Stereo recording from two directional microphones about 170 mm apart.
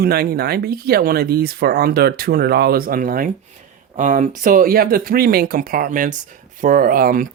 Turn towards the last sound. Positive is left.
turn(degrees=-55)  # may be behind; listen again after turning